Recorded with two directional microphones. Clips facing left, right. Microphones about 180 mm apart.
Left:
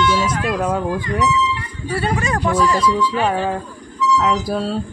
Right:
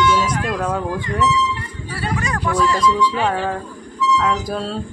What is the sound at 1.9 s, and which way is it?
Speech, 25° left (ahead or behind).